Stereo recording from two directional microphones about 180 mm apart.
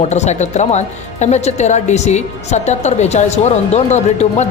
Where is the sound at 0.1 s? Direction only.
40° left (ahead or behind).